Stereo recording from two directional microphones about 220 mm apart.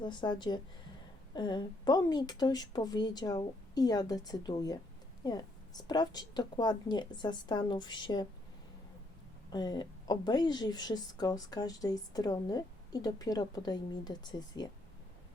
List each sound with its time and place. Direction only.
0.0 s a woman's voice: 20° left (ahead or behind)
9.5 s a woman's voice: 20° left (ahead or behind)